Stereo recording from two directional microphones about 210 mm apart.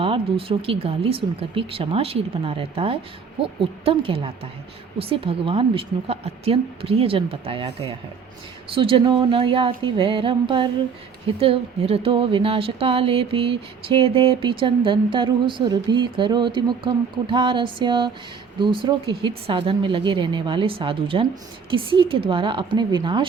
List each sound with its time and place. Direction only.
0.0 s speech: 25° right (ahead or behind)